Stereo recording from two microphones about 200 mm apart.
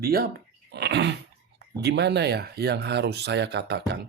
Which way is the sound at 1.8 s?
55° right (ahead or behind).